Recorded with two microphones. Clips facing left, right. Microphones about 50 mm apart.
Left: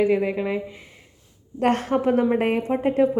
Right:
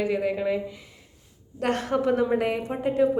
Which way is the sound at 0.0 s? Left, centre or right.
Left.